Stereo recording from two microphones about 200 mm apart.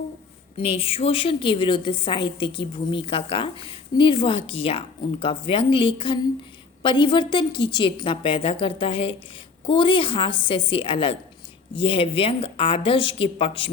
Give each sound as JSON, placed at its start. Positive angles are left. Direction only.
{"t": 0.5, "sound": "a woman's voice", "side_deg": 30}